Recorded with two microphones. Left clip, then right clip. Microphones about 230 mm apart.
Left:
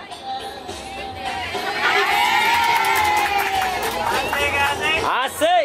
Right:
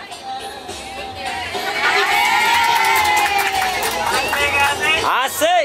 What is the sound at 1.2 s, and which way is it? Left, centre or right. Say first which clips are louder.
Crowd: right 2 dB; centre.